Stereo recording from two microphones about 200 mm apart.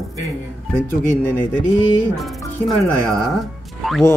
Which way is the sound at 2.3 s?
15° left (ahead or behind).